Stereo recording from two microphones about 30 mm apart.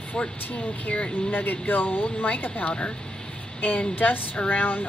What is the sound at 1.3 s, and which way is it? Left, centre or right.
Speech, left.